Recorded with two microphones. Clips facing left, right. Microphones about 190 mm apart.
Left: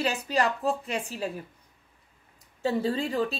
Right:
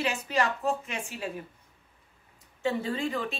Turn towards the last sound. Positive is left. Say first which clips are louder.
# left 3 dB
turn(degrees=35)  # may be behind; listen again after turning